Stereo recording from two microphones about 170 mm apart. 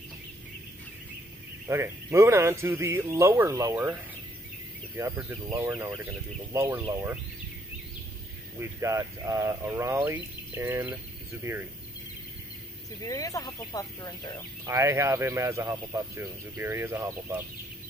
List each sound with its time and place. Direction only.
1.7 s speech: 15° right (ahead or behind)
8.5 s speech: 15° right (ahead or behind)
13.0 s speech: 20° left (ahead or behind)
14.7 s speech: 15° right (ahead or behind)